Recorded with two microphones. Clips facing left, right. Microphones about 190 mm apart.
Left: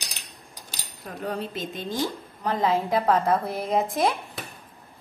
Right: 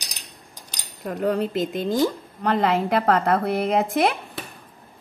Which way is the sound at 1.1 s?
65° right (ahead or behind).